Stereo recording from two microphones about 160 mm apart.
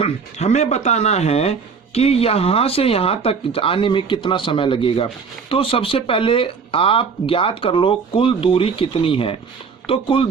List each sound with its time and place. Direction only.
0.0 s speech: 45° left (ahead or behind)